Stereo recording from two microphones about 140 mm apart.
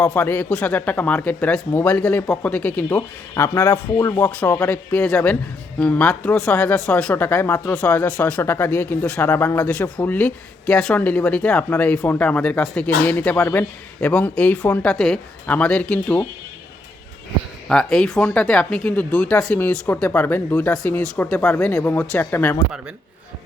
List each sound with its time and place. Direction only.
0.0 s speech: 10° left (ahead or behind)
17.7 s speech: 5° left (ahead or behind)